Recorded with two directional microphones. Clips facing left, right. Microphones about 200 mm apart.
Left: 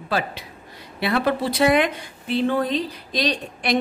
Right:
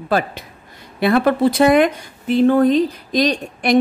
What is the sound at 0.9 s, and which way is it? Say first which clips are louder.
A woman's voice: right 6 dB; 50° right (ahead or behind).